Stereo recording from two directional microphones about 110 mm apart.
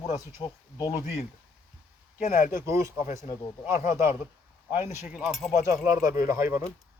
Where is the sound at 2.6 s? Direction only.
25° right (ahead or behind).